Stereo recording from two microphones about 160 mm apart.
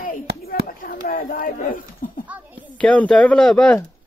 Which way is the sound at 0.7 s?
60° left (ahead or behind).